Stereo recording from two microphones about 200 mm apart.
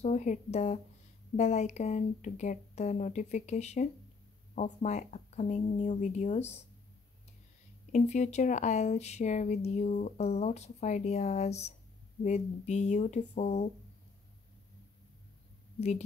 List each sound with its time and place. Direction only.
0.0 s speech: 35° left (ahead or behind)
7.9 s speech: 35° left (ahead or behind)